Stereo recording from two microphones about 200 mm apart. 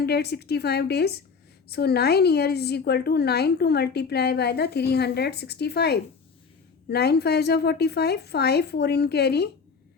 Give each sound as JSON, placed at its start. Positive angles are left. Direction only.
{"t": 0.0, "sound": "a woman's voice", "side_deg": 55}